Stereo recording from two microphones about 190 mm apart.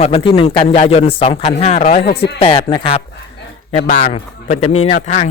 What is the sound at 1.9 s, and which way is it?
Speech, 50° left (ahead or behind).